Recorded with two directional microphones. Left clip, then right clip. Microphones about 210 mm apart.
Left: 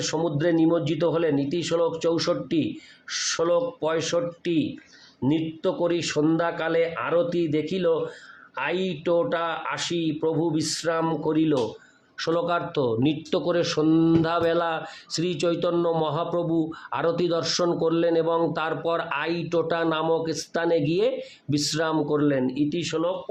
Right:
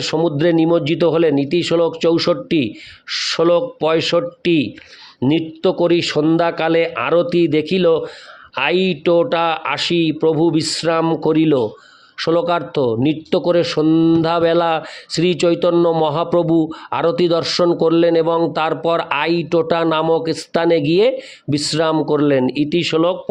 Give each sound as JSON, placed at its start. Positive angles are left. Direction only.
{"t": 0.0, "sound": "speech", "side_deg": -40}